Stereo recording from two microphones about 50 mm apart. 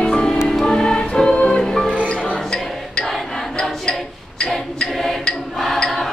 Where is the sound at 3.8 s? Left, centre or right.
Centre.